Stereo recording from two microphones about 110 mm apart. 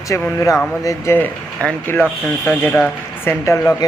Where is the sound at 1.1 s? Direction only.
15° left (ahead or behind).